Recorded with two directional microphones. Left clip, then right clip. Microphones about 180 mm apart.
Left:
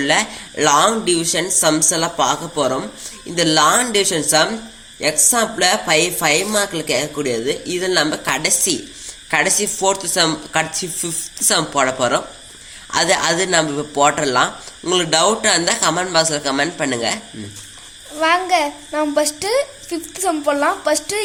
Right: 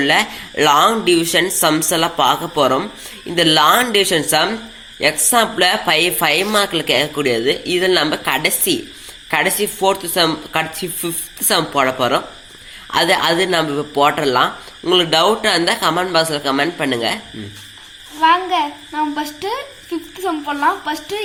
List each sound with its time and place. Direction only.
0.0 s a man's voice: 5° right (ahead or behind)
18.2 s a child's voice: 70° left (ahead or behind)